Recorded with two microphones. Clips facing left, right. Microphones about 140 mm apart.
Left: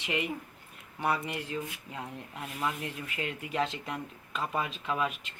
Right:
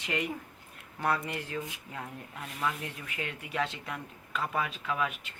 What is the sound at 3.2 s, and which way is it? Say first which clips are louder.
Speech: left 2 dB; 35° left (ahead or behind).